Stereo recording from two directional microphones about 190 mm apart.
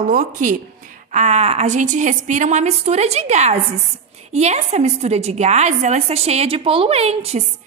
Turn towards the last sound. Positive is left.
turn(degrees=-35)  # may be behind; listen again after turning